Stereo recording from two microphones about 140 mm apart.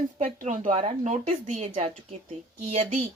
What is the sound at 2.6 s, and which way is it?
Speech, 70° right (ahead or behind).